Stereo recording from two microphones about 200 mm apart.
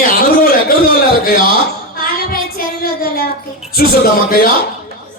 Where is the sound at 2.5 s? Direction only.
50° left (ahead or behind).